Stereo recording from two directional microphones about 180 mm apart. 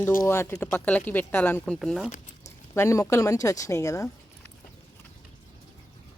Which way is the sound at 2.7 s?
15° left (ahead or behind).